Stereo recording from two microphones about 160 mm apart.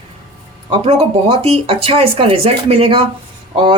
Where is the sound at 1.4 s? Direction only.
35° right (ahead or behind).